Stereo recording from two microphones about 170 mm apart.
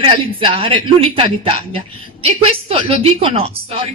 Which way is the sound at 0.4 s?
35° right (ahead or behind).